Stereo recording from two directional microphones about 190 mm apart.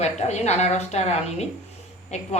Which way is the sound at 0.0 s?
35° left (ahead or behind).